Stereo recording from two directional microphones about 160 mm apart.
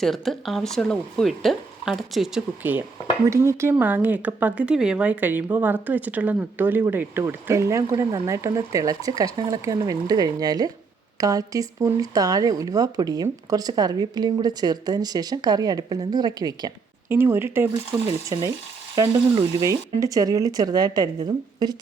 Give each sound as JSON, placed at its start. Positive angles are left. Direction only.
{"t": 0.0, "sound": "speech", "side_deg": 0}
{"t": 18.9, "sound": "speech", "side_deg": -20}